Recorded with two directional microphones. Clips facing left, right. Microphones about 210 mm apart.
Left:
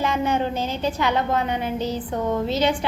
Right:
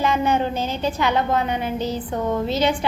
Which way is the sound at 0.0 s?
5° right (ahead or behind).